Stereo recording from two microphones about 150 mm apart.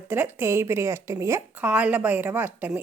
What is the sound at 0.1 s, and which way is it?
A woman's voice, 15° right (ahead or behind).